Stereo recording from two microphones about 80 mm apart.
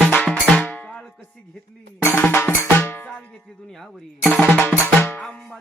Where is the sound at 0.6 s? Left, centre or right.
Centre.